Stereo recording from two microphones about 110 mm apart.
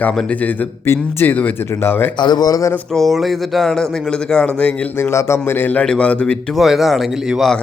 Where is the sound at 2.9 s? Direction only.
Centre (ahead or behind).